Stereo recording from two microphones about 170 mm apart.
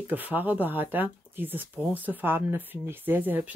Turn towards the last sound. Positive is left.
turn(degrees=-10)  # may be behind; listen again after turning